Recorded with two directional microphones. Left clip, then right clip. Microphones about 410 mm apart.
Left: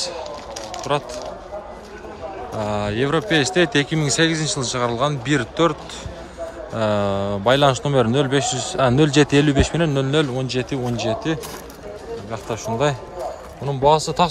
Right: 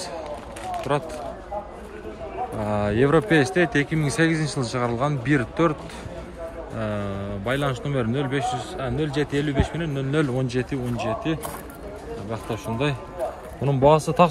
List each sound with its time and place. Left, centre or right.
0.9 s speech: centre
2.6 s speech: centre
6.8 s a man's voice: centre
13.7 s speech: centre